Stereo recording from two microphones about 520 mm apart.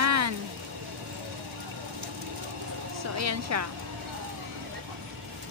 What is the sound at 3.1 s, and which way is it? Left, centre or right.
Speech, right.